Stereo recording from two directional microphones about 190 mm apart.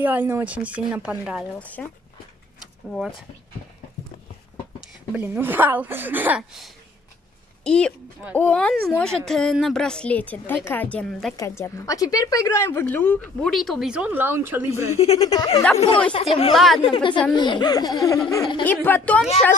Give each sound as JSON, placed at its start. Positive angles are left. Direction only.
{"t": 0.0, "sound": "speech", "side_deg": -10}
{"t": 1.6, "sound": "a woman's voice", "side_deg": 10}
{"t": 2.6, "sound": "a sound", "side_deg": 0}
{"t": 5.1, "sound": "a woman's voice", "side_deg": -10}
{"t": 11.3, "sound": "a woman's voice", "side_deg": 15}
{"t": 15.0, "sound": "speech", "side_deg": 30}
{"t": 16.5, "sound": "a woman's voice", "side_deg": 0}
{"t": 16.8, "sound": "speech", "side_deg": 25}
{"t": 18.6, "sound": "a woman's voice", "side_deg": 10}